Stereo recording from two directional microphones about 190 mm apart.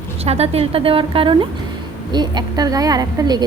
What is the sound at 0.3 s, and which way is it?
A woman's voice, 35° right (ahead or behind).